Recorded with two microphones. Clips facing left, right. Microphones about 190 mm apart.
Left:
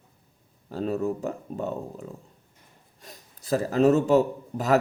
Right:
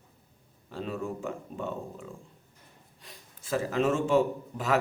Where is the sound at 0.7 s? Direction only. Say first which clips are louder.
Left 7 dB; 40° left (ahead or behind).